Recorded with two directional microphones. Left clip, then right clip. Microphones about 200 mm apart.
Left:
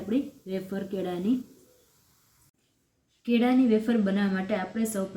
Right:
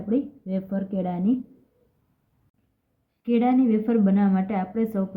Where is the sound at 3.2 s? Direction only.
25° right (ahead or behind).